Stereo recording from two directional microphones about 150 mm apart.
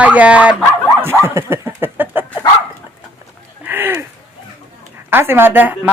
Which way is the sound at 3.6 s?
15° right (ahead or behind).